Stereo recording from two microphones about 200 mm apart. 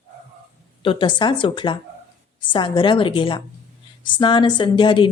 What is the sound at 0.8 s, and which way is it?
A woman's voice, 25° left (ahead or behind).